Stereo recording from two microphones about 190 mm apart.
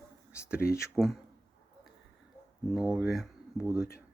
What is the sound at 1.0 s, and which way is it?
Speech, centre (ahead or behind).